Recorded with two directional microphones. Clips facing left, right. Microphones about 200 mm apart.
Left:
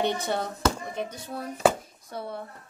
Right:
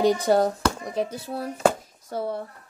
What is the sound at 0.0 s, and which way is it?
A woman's voice, 35° right (ahead or behind).